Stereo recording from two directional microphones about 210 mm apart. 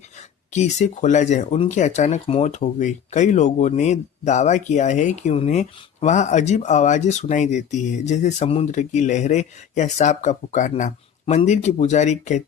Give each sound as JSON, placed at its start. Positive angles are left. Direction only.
{"t": 0.5, "sound": "speech", "side_deg": 35}